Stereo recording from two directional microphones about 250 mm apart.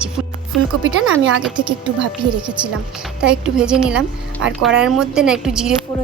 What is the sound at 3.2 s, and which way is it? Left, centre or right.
A woman's voice, centre.